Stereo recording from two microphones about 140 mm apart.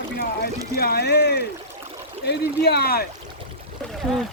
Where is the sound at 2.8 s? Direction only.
90° left.